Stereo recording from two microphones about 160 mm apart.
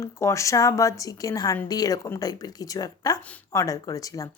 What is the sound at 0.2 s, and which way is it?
A woman's voice, 20° left (ahead or behind).